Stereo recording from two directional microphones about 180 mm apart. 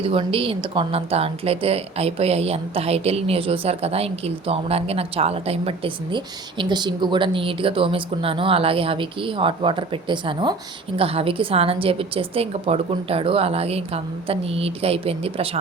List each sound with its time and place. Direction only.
0.0 s a woman's voice: 30° right (ahead or behind)